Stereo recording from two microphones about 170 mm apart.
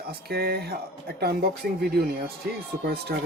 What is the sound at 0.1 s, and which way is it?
Speech, 65° right (ahead or behind).